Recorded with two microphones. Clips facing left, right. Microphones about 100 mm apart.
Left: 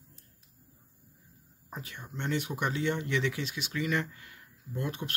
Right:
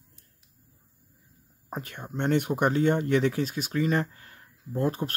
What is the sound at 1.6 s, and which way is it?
Speech, 50° right (ahead or behind).